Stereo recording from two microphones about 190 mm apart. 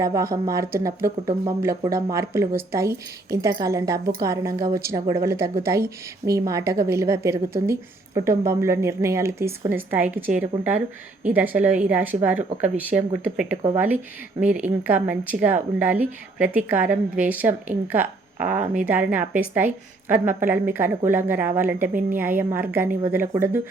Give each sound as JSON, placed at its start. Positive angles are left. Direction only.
{"t": 0.0, "sound": "a woman's voice", "side_deg": -15}